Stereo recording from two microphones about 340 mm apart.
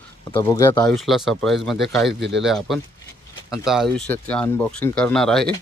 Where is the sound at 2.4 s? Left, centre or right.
Centre.